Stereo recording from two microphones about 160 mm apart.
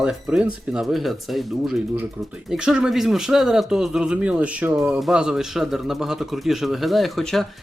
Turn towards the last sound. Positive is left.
turn(degrees=0)  # may be behind; listen again after turning